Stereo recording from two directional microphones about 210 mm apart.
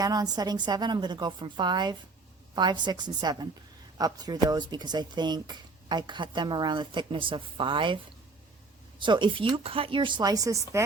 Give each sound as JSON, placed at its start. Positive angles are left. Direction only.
{"t": 0.0, "sound": "speech", "side_deg": -20}
{"t": 9.0, "sound": "speech", "side_deg": -20}